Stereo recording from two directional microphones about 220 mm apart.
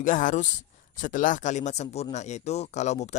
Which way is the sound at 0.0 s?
35° left (ahead or behind).